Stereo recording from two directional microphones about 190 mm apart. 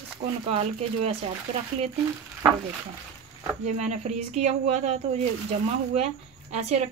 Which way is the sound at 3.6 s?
35° right (ahead or behind).